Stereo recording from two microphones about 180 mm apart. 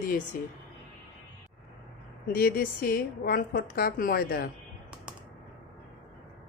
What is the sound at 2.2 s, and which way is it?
A woman's voice, 55° left (ahead or behind).